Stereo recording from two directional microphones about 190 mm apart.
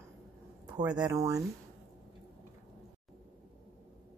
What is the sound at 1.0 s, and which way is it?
Speech, 20° right (ahead or behind).